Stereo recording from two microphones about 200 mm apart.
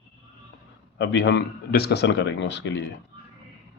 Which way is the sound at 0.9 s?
60° left (ahead or behind).